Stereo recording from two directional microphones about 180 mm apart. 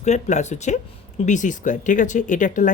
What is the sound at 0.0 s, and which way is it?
Speech, 40° left (ahead or behind).